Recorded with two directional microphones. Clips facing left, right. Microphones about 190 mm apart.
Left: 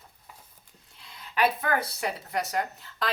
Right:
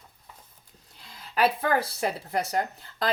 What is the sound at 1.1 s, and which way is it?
Speech, 35° right (ahead or behind).